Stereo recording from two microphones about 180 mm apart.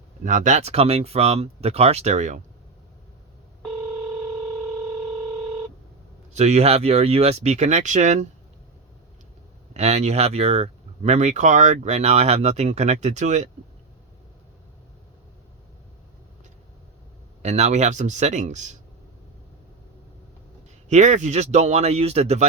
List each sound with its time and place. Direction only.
0.3 s speech: 45° right (ahead or behind)
6.3 s speech: 40° right (ahead or behind)
9.7 s speech: 40° right (ahead or behind)
17.4 s speech: 40° right (ahead or behind)
20.9 s speech: 40° right (ahead or behind)